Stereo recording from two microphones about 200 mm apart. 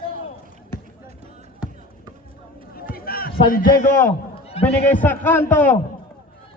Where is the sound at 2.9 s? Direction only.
50° left (ahead or behind).